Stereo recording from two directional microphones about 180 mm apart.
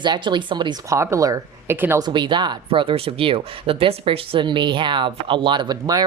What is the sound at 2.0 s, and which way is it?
Speech, 25° right (ahead or behind).